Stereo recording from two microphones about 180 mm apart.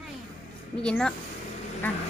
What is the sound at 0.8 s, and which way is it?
Speech, 5° left (ahead or behind).